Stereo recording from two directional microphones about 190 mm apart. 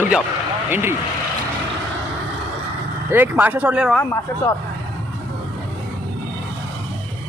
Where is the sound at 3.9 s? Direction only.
15° left (ahead or behind).